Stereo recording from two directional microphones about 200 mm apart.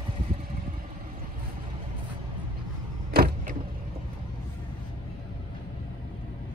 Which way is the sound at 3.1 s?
50° right (ahead or behind).